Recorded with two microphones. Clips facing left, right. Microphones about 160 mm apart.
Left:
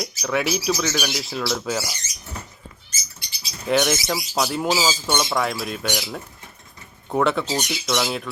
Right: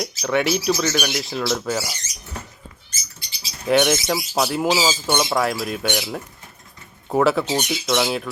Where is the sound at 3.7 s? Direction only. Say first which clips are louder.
Right 3 dB; centre (ahead or behind).